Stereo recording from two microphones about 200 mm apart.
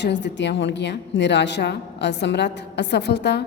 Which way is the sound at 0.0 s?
60° left (ahead or behind).